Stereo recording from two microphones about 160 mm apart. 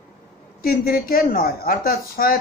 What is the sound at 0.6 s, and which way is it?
Speech, 65° left (ahead or behind).